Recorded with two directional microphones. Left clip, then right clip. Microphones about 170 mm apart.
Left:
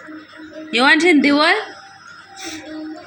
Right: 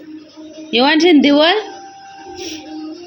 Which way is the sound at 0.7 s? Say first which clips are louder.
Right 2 dB; 35° right (ahead or behind).